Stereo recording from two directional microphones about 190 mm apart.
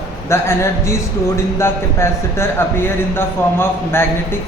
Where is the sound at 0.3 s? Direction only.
15° left (ahead or behind).